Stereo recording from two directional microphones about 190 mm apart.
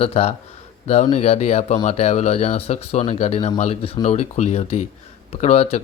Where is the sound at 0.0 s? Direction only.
30° left (ahead or behind).